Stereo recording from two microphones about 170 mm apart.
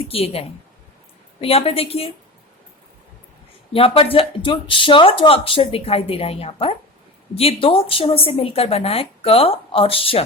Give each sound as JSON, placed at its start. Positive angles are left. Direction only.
{"t": 0.1, "sound": "speech", "side_deg": 35}
{"t": 3.7, "sound": "speech", "side_deg": 35}